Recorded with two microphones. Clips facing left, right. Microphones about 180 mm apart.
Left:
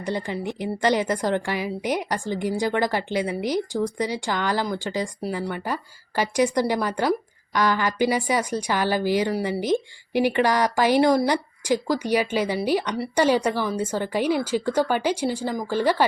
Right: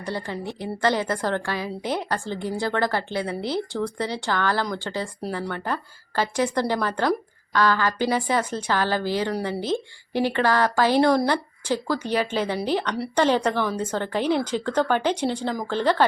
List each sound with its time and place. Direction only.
0.0 s a woman's voice: 15° left (ahead or behind)